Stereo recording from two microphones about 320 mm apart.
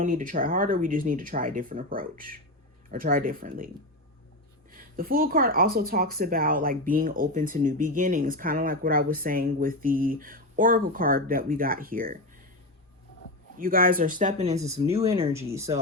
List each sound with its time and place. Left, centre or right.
0.0 s speech: right
4.7 s speech: right
13.6 s speech: right; by 15.8 s centre